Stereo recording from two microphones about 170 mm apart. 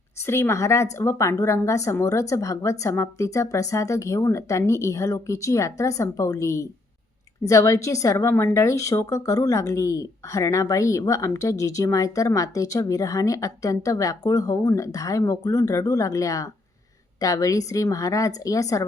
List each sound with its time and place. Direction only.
0.2 s a woman's voice: 15° left (ahead or behind)